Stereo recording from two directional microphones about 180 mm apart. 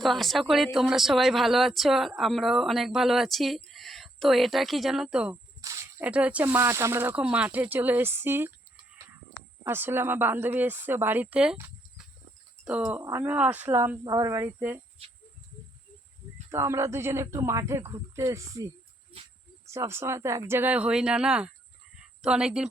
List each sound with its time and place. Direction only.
0.0 s speech: centre (ahead or behind)
5.6 s speech: 15° right (ahead or behind)
9.6 s speech: 10° right (ahead or behind)
16.5 s speech: 15° right (ahead or behind)
19.7 s speech: 15° right (ahead or behind)